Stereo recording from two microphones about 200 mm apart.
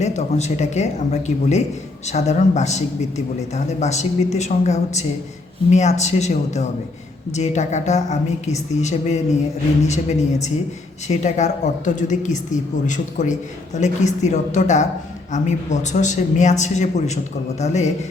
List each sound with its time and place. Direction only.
0.0 s a woman's voice: 35° left (ahead or behind)